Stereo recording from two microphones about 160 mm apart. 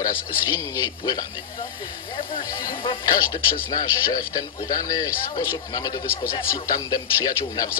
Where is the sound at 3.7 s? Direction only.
25° left (ahead or behind).